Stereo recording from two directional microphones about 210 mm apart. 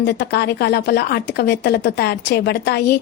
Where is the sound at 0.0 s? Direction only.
50° left (ahead or behind).